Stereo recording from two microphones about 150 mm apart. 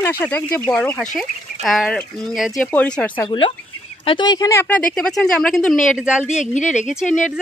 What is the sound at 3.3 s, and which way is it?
Speech, 35° left (ahead or behind).